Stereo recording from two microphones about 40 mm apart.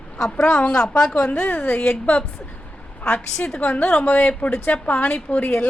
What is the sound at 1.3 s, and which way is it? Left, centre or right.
A woman's voice, left.